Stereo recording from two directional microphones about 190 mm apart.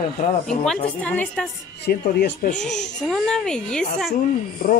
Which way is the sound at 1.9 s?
55° left (ahead or behind).